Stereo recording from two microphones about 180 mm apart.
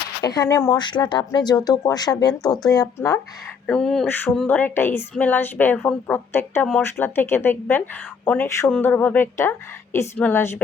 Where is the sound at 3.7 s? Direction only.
5° left (ahead or behind).